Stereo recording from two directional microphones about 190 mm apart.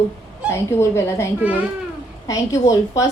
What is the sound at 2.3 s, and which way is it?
Speech, 20° left (ahead or behind).